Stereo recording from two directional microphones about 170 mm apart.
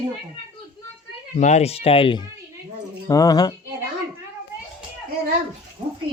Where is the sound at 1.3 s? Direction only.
40° left (ahead or behind); by 3.6 s 20° left (ahead or behind).